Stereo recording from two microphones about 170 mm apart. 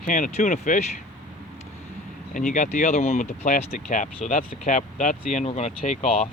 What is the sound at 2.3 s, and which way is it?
Speech, 50° left (ahead or behind).